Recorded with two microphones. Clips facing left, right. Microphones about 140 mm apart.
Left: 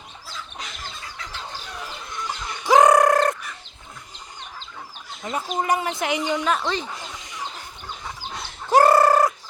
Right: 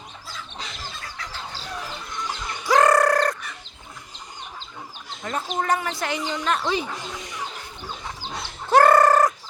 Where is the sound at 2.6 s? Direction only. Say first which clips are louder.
Left 3 dB; 20° left (ahead or behind).